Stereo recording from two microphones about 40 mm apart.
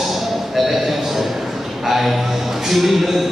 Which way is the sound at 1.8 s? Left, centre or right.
Centre.